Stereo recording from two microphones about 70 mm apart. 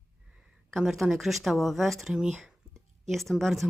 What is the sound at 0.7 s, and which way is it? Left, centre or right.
Speech, centre.